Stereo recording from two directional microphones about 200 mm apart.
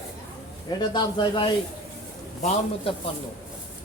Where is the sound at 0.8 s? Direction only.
20° left (ahead or behind).